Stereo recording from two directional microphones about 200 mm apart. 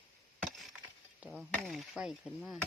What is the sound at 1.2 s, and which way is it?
Speech, 5° right (ahead or behind).